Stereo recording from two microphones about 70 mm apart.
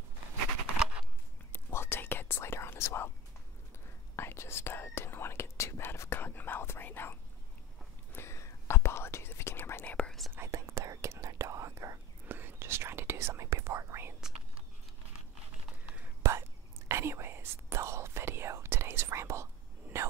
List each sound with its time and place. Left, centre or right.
1.5 s whispering: left
4.2 s whispering: left
9.8 s whispering: centre
10.3 s whispering: right
12.3 s whispering: right
15.8 s whispering: right
16.2 s whispering: right